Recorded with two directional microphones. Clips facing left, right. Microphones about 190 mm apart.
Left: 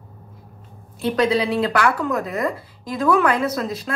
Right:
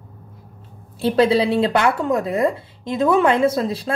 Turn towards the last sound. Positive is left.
turn(degrees=-30)  # may be behind; listen again after turning